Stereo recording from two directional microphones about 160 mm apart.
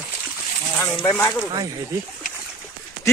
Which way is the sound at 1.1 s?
15° left (ahead or behind).